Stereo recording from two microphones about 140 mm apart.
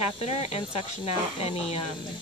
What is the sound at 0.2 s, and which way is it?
Speech, 45° left (ahead or behind).